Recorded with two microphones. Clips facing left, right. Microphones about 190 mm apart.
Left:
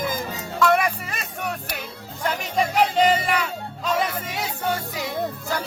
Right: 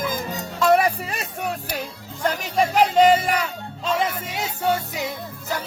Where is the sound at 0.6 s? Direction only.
35° right (ahead or behind).